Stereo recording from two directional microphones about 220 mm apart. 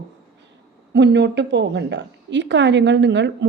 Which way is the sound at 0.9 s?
50° right (ahead or behind).